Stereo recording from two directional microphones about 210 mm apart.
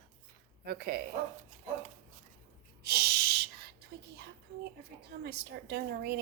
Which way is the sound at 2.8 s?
50° right (ahead or behind).